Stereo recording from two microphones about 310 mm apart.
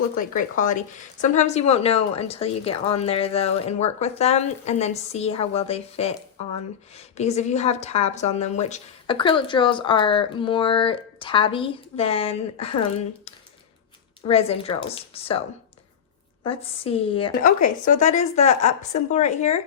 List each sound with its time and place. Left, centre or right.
0.3 s speech: left
14.3 s speech: centre
16.4 s speech: centre